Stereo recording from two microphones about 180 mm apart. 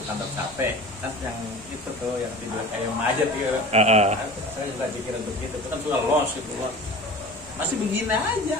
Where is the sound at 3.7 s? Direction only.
35° right (ahead or behind).